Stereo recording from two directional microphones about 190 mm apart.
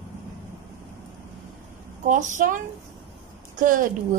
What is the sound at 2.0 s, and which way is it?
Speech, 45° right (ahead or behind).